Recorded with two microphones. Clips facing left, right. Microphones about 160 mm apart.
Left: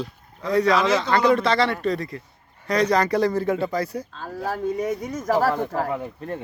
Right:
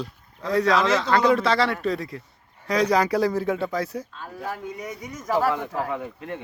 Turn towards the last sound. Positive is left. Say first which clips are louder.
# left 2 dB
turn(degrees=40)  # may be behind; listen again after turning